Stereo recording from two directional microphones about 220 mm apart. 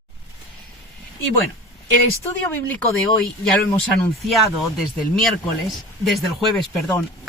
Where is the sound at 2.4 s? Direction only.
5° left (ahead or behind).